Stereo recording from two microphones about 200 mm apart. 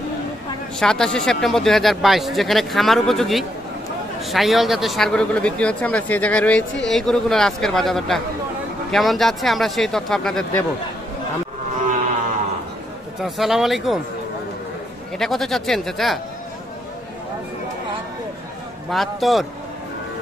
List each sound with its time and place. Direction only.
0.7 s speech: 5° left (ahead or behind)
13.2 s speech: centre (ahead or behind)
15.1 s speech: centre (ahead or behind)
18.9 s speech: centre (ahead or behind)